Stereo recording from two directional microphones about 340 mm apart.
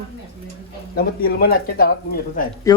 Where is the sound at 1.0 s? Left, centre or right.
Left.